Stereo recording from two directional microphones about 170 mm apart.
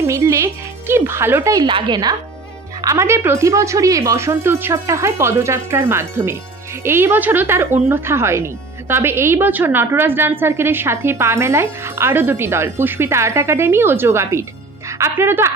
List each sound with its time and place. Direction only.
0.0 s a woman's voice: 15° right (ahead or behind)